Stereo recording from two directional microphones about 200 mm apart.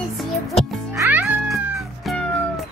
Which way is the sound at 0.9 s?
10° right (ahead or behind).